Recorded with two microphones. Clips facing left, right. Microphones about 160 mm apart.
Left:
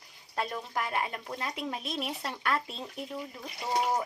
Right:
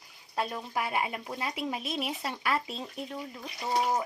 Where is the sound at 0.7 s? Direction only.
10° right (ahead or behind).